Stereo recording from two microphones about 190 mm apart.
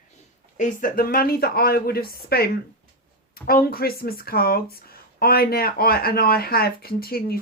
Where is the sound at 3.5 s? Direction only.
50° left (ahead or behind).